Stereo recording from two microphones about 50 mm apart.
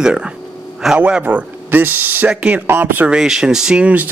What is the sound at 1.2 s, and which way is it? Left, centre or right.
Speech, right.